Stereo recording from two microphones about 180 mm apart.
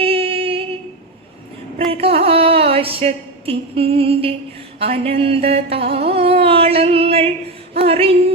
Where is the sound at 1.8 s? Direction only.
30° right (ahead or behind).